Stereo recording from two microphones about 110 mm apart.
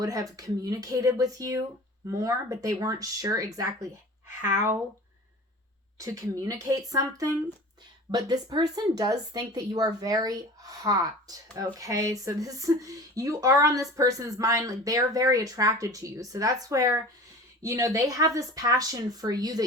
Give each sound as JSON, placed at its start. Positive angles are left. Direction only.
{"t": 0.0, "sound": "a woman's voice", "side_deg": -35}
{"t": 6.0, "sound": "a woman's voice", "side_deg": -30}